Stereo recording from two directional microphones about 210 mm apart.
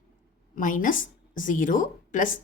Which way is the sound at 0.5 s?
40° left (ahead or behind).